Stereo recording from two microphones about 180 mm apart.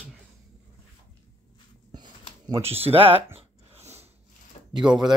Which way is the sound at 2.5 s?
35° right (ahead or behind).